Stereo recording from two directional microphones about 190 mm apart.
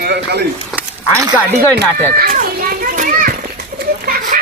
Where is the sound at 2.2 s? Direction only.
50° right (ahead or behind).